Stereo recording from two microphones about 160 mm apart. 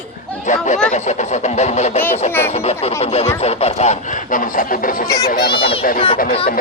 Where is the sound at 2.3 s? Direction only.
15° left (ahead or behind).